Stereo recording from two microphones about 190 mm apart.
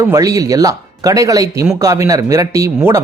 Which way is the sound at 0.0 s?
15° right (ahead or behind).